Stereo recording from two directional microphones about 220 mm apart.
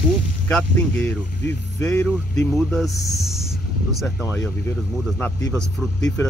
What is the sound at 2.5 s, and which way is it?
Speech, centre (ahead or behind).